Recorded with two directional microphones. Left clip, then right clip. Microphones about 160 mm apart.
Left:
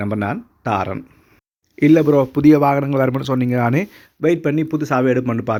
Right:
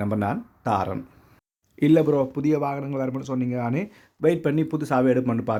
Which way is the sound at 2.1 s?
35° left (ahead or behind).